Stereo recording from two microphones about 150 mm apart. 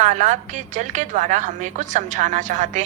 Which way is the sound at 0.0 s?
55° right (ahead or behind).